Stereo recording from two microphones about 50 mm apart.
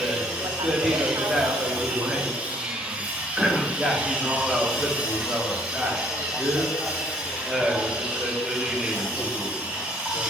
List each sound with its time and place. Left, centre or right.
0.7 s speech: centre
3.3 s a sound: centre
4.4 s a man's voice: centre